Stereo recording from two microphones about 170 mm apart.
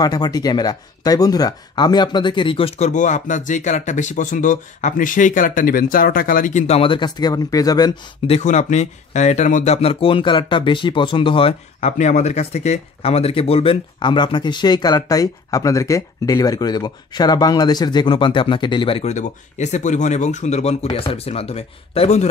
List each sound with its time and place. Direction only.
0.0 s speech: 25° left (ahead or behind); by 6.6 s 55° left (ahead or behind)
6.7 s speech: 30° left (ahead or behind)
8.3 s speech: 45° left (ahead or behind)